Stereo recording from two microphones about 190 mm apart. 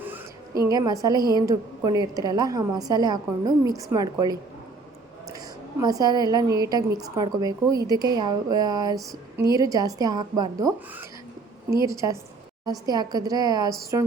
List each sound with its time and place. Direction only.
0.6 s a woman's voice: 20° right (ahead or behind)
5.8 s a woman's voice: 20° right (ahead or behind)